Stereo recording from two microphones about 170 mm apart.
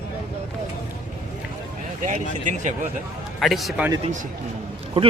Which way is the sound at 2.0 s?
45° right (ahead or behind).